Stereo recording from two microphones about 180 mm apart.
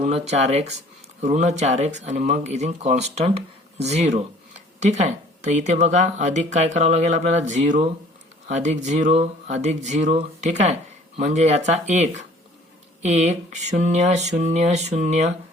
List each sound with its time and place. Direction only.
0.0 s speech: 35° right (ahead or behind)